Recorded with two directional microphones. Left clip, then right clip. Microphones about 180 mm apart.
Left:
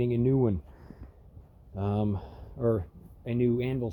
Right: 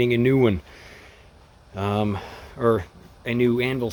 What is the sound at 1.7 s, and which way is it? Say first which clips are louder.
Speech: right 7 dB; 5° right (ahead or behind).